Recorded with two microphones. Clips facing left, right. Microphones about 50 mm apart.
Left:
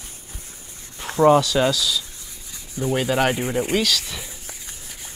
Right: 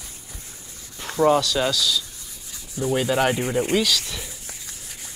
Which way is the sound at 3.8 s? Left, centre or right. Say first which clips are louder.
Even; centre.